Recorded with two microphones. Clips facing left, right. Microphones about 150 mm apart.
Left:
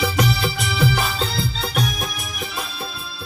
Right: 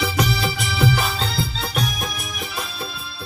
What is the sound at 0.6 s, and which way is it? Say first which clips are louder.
Music: right 1 dB; centre (ahead or behind).